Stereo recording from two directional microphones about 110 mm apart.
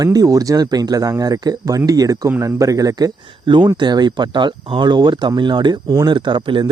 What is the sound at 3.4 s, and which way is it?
Speech, 45° right (ahead or behind).